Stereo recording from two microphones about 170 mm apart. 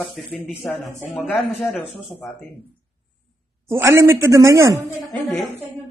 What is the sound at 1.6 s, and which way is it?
Speech, centre (ahead or behind).